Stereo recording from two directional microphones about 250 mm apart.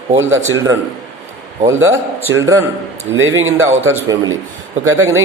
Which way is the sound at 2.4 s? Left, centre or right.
Centre.